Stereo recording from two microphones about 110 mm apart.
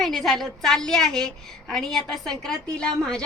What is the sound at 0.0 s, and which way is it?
A woman's voice, centre (ahead or behind).